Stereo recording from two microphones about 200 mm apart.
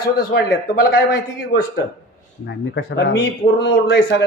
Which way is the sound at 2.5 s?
60° left (ahead or behind).